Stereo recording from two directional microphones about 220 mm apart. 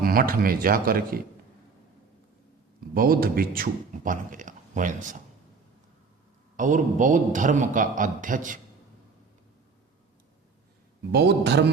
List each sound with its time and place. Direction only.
0.0 s speech: 40° right (ahead or behind)
2.9 s speech: 40° right (ahead or behind)
6.6 s speech: 35° right (ahead or behind)
11.1 s a man's voice: 50° right (ahead or behind)